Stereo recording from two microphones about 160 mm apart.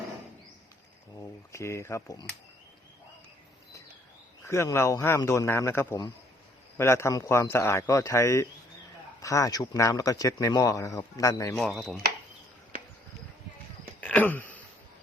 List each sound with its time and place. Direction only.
1.1 s speech: 20° left (ahead or behind)
4.4 s a man's voice: 15° left (ahead or behind)
11.5 s speech: centre (ahead or behind)
14.0 s throat clearing: 10° left (ahead or behind)